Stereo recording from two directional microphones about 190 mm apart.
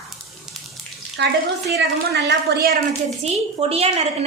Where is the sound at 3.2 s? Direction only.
35° right (ahead or behind).